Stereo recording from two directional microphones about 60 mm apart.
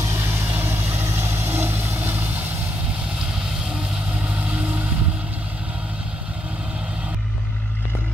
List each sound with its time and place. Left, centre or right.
0.0 s vehicle: right
4.4 s vehicle: right